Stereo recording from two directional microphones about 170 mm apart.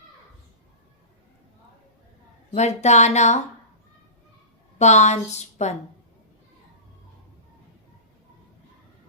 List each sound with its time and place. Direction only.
2.6 s a woman's voice: 40° left (ahead or behind)
4.8 s a woman's voice: 40° left (ahead or behind)